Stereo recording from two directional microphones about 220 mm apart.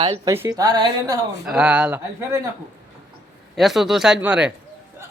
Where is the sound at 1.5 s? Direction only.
5° right (ahead or behind).